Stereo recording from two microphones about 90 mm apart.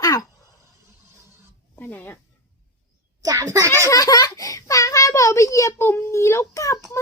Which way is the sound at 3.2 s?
40° right (ahead or behind).